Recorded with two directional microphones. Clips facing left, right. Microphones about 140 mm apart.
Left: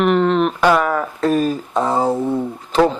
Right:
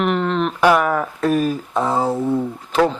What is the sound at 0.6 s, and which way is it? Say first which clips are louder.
A man's voice: even; 15° right (ahead or behind).